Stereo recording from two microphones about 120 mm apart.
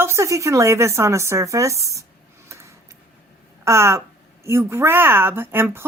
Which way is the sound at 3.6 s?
20° right (ahead or behind).